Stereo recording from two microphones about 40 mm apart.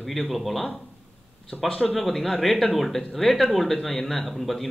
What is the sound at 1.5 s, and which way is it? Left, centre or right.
Speech, left.